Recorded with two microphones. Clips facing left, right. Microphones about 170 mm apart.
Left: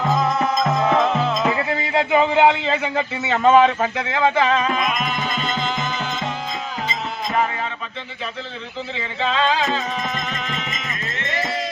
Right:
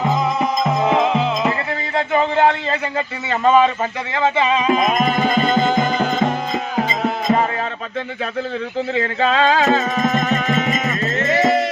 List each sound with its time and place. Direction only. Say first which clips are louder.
0.6 s music: right 2 dB; 5° right (ahead or behind)
2.1 s a man's voice: even; 10° left (ahead or behind)
4.1 s music: right 1 dB; 5° right (ahead or behind)
4.7 s music: right 6 dB; 45° right (ahead or behind)
9.0 s a sound: right 4 dB; 45° right (ahead or behind)
9.7 s music: right 7 dB; 45° right (ahead or behind)